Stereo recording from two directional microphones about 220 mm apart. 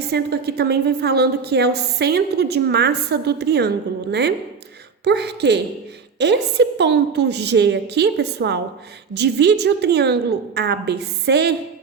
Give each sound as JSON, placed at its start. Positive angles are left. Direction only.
{"t": 0.1, "sound": "a woman's voice", "side_deg": -45}